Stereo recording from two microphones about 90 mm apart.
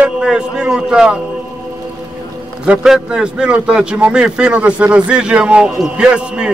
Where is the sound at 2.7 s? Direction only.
10° right (ahead or behind).